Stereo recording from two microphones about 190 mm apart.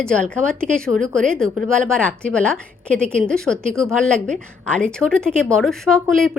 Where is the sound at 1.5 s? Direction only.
5° left (ahead or behind).